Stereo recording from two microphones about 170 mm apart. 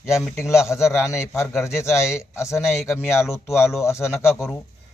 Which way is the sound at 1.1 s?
15° left (ahead or behind).